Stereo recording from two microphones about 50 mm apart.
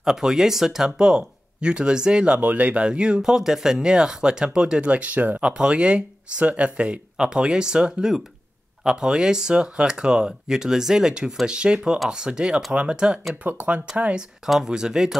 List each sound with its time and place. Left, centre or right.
0.0 s speech: centre
2.4 s speech: right
5.4 s speech: centre
13.5 s speech: right
14.4 s speech: centre